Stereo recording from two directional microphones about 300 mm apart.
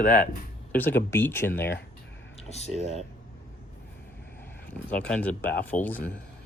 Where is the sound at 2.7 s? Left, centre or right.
Centre.